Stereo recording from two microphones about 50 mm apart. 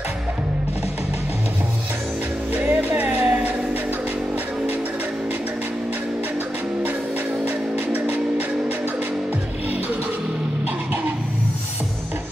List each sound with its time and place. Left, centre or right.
2.5 s music: right
7.4 s music: right